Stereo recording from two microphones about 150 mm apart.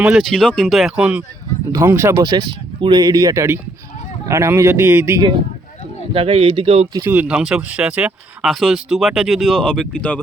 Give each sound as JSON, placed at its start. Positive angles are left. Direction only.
{"t": 0.0, "sound": "speech", "side_deg": -5}
{"t": 6.1, "sound": "a man's voice", "side_deg": -40}
{"t": 7.1, "sound": "speech", "side_deg": -10}